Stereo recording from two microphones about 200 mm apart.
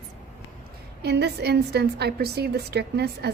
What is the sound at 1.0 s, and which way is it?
A woman's voice, 55° right (ahead or behind).